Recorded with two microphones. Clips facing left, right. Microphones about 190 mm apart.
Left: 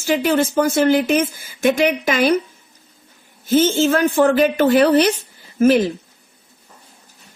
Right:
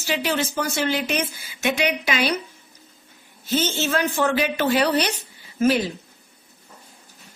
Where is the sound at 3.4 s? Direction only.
50° left (ahead or behind).